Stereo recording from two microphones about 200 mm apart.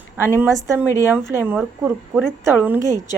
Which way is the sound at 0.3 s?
10° right (ahead or behind).